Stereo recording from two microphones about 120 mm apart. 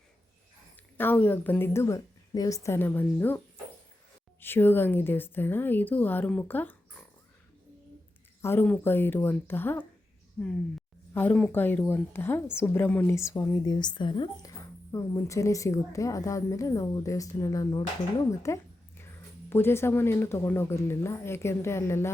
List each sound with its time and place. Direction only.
0.9 s a woman's voice: 15° left (ahead or behind)
8.4 s a woman's voice: 20° left (ahead or behind)
11.1 s speech: 15° left (ahead or behind)
11.3 s a woman's voice: 5° left (ahead or behind)
11.6 s a woman's voice: 15° left (ahead or behind)
13.1 s a woman's voice: 25° left (ahead or behind)
13.7 s speech: 40° left (ahead or behind)
14.9 s a woman's voice: 25° left (ahead or behind)